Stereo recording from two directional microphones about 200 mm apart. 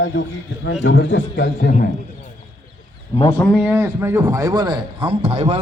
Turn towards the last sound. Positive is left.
turn(degrees=-30)  # may be behind; listen again after turning